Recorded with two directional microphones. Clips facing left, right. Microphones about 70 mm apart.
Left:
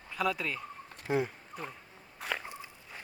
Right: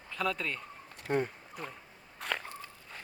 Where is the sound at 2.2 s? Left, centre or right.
Centre.